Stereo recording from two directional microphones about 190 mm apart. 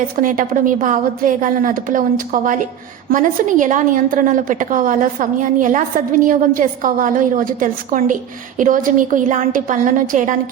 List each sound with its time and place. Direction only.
0.2 s a woman's voice: 45° right (ahead or behind)